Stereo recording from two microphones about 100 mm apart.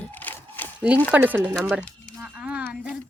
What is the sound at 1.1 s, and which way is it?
Speech, 15° right (ahead or behind).